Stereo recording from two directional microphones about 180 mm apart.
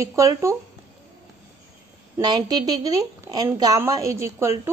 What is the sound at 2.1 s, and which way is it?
A woman's voice, 20° right (ahead or behind).